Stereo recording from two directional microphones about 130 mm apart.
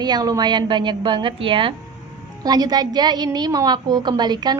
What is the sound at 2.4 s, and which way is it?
A woman's voice, 30° right (ahead or behind).